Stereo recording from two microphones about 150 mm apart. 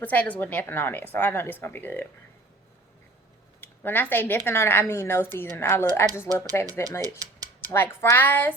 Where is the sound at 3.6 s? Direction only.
15° left (ahead or behind).